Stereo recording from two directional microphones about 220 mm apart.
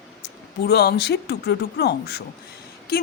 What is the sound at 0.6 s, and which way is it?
Speech, 45° left (ahead or behind).